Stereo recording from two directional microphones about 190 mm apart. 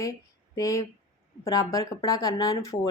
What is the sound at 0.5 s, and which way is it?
Speech, 15° left (ahead or behind).